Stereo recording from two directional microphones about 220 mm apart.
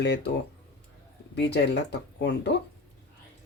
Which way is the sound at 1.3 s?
50° left (ahead or behind).